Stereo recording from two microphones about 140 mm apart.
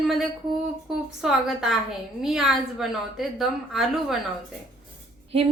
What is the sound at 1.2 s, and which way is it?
A woman's voice, 5° right (ahead or behind).